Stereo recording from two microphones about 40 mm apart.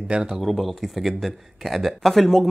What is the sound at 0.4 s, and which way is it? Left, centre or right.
Speech, centre.